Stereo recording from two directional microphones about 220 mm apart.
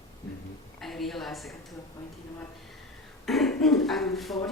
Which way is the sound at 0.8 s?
Centre (ahead or behind).